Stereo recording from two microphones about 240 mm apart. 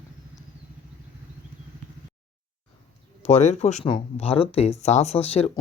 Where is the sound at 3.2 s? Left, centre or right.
Left.